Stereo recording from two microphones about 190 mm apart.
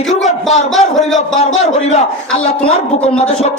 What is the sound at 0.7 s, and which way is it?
Speech, centre (ahead or behind).